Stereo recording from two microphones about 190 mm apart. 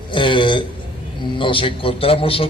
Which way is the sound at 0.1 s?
25° left (ahead or behind).